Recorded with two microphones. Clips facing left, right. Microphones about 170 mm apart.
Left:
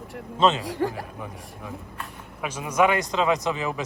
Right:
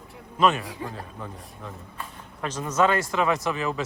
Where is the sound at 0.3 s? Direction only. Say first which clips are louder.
Left 1 dB; 25° left (ahead or behind).